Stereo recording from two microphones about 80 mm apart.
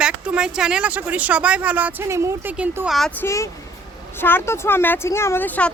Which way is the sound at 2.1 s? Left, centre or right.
Right.